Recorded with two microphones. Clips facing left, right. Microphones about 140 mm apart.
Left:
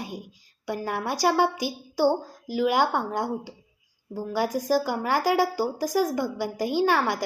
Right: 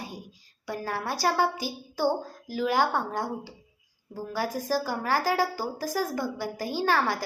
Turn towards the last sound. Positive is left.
turn(degrees=15)  # may be behind; listen again after turning